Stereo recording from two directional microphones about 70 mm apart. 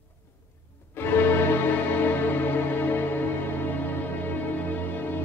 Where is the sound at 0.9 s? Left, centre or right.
Left.